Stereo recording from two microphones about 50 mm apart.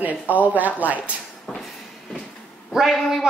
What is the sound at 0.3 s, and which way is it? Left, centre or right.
Speech, right.